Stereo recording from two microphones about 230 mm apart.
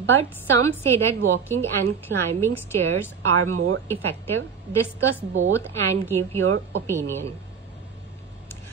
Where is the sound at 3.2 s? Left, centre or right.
Right.